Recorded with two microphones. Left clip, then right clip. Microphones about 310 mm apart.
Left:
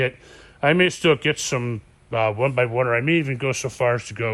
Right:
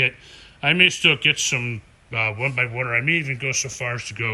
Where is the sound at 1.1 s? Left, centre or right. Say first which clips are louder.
Right 1 dB; left.